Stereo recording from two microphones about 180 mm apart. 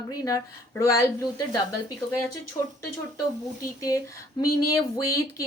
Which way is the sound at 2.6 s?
25° left (ahead or behind).